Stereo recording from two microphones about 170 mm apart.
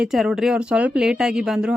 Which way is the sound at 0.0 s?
5° right (ahead or behind).